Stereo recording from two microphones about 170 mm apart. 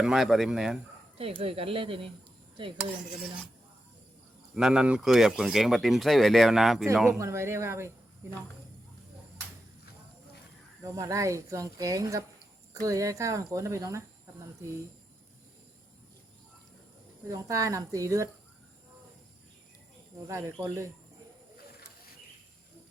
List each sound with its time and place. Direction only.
0.0 s speech: centre (ahead or behind)
1.2 s speech: 35° right (ahead or behind)
4.5 s speech: 5° right (ahead or behind)
7.1 s speech: 15° right (ahead or behind)
10.8 s speech: 20° right (ahead or behind)
17.2 s speech: 20° right (ahead or behind)
20.2 s speech: 15° right (ahead or behind)